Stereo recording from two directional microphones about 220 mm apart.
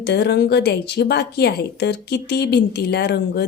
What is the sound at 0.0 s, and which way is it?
Speech, 50° left (ahead or behind).